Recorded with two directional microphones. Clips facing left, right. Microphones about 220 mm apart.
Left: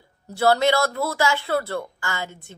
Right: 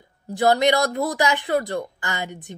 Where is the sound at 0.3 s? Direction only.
15° right (ahead or behind).